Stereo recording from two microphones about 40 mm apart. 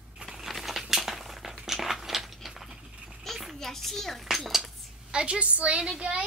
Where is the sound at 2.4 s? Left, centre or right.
Centre.